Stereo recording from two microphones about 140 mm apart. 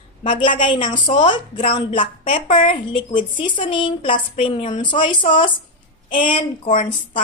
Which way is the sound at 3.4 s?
35° left (ahead or behind).